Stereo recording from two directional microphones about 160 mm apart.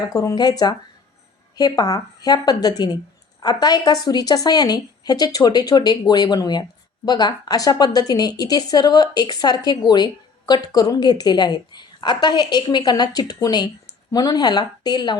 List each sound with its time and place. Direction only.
0.1 s a woman's voice: 25° left (ahead or behind)